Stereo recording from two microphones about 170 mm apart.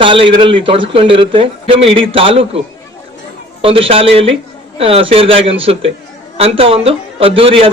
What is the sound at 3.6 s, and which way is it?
A man's voice, 35° right (ahead or behind).